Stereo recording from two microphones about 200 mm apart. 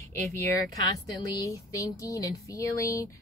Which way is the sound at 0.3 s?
15° left (ahead or behind).